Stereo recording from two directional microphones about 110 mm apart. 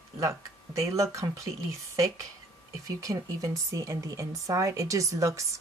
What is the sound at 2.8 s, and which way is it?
Speech, 30° right (ahead or behind).